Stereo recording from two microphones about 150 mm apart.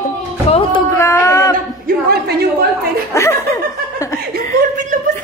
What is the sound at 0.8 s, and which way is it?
Speech, 20° left (ahead or behind).